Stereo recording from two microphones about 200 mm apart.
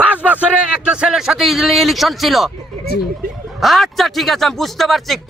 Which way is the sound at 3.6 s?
Centre (ahead or behind).